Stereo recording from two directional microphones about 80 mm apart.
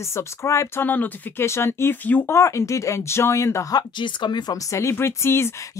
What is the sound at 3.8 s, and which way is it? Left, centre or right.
Speech, left.